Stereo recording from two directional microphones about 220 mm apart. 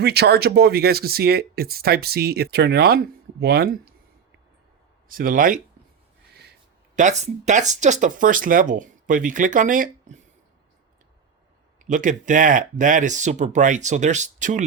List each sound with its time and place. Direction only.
0.0 s speech: 45° right (ahead or behind)
5.0 s speech: 40° right (ahead or behind)
6.9 s speech: 35° right (ahead or behind)
11.9 s speech: 35° right (ahead or behind)